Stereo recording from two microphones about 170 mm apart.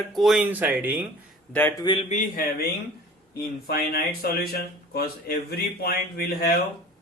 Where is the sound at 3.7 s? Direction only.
65° left (ahead or behind).